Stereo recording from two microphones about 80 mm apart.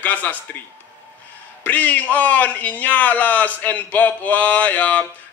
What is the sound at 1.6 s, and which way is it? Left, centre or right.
A man's voice, left.